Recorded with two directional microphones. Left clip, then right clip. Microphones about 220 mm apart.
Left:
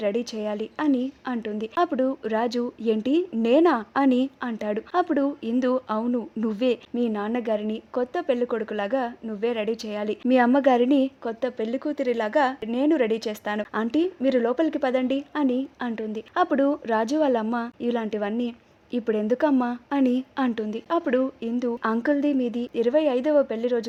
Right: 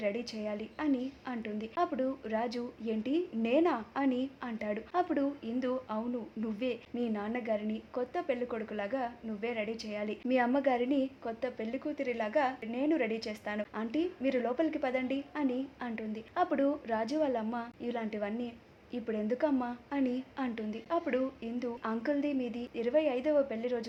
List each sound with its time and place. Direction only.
0.0 s a woman's voice: 50° left (ahead or behind)